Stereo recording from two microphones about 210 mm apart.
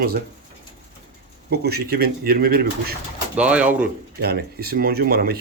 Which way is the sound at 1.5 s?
50° right (ahead or behind).